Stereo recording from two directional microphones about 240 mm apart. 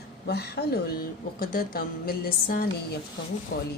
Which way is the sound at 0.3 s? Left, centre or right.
Left.